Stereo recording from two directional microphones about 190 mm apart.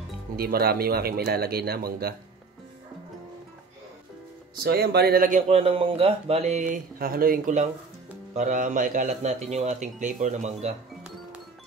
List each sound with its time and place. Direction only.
0.4 s speech: 50° right (ahead or behind)
4.6 s speech: 55° right (ahead or behind)
5.5 s a man's voice: 30° right (ahead or behind)